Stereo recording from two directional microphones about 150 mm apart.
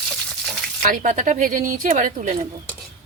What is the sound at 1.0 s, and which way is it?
Speech, 55° right (ahead or behind).